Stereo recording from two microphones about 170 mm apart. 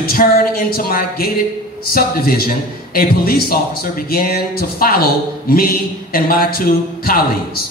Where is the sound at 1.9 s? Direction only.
60° left (ahead or behind).